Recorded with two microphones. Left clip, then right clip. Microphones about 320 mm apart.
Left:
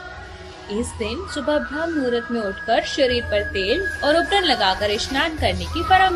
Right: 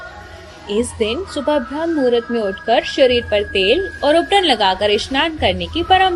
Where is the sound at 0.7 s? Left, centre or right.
Centre.